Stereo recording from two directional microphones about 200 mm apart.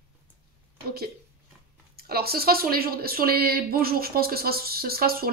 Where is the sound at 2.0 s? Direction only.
50° right (ahead or behind).